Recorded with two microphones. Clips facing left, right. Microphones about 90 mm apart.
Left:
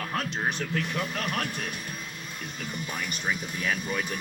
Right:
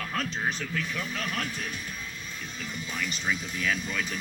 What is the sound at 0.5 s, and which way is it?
Speech, 60° left (ahead or behind).